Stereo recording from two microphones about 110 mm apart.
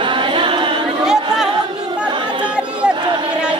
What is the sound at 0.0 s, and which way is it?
A capella, 50° right (ahead or behind).